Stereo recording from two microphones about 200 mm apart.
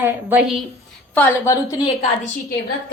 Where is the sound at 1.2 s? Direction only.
10° left (ahead or behind).